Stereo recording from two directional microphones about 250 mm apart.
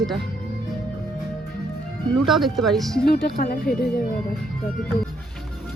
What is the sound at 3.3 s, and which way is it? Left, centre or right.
Speech, left.